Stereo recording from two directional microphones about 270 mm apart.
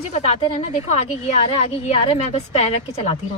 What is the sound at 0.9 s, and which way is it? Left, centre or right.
Speech, left.